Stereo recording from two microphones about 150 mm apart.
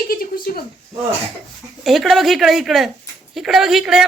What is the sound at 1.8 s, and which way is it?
Speech, centre (ahead or behind).